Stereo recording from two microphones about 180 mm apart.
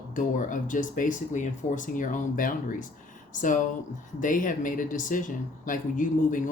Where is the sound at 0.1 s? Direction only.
45° left (ahead or behind).